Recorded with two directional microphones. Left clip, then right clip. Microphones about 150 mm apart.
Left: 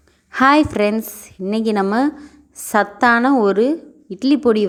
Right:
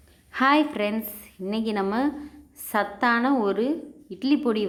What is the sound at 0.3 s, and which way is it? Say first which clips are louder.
A woman's voice: left 7 dB; 40° left (ahead or behind).